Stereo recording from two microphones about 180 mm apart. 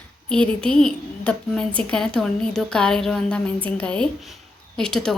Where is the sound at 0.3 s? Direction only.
5° left (ahead or behind).